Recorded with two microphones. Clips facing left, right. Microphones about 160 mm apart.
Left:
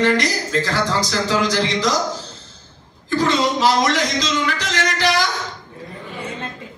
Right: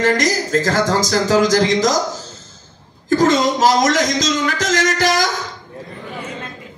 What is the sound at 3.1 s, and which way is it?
A man's voice, 45° right (ahead or behind).